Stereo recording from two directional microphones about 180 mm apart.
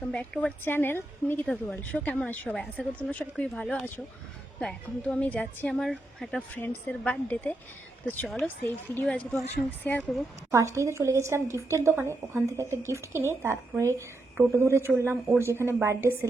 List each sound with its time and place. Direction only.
0.0 s a woman's voice: 5° left (ahead or behind)
10.5 s a woman's voice: 15° right (ahead or behind)